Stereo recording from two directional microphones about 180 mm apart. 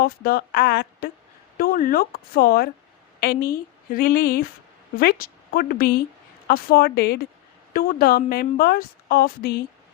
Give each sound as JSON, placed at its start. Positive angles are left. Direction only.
{"t": 0.0, "sound": "a woman's voice", "side_deg": 60}